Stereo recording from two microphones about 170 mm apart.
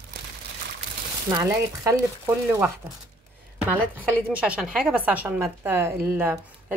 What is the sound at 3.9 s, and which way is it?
A woman's voice, 10° right (ahead or behind).